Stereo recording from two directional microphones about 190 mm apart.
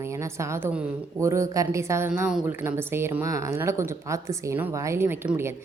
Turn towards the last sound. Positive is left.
turn(degrees=-10)  # may be behind; listen again after turning